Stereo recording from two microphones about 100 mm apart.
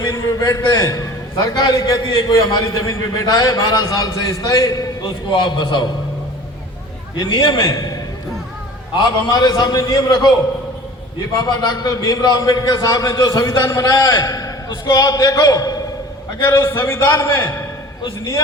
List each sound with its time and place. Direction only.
0.0 s a man's voice: 35° left (ahead or behind)
5.3 s a man's voice: 50° left (ahead or behind)
7.2 s a man's voice: 55° left (ahead or behind)
7.7 s a man's voice: 35° left (ahead or behind)
9.0 s a man's voice: 50° left (ahead or behind)
11.3 s a man's voice: 45° left (ahead or behind)
13.6 s a man's voice: 30° left (ahead or behind)
13.8 s a man's voice: 40° left (ahead or behind)
16.5 s a man's voice: 25° left (ahead or behind)